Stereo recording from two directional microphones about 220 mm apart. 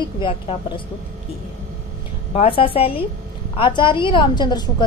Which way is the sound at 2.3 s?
25° left (ahead or behind).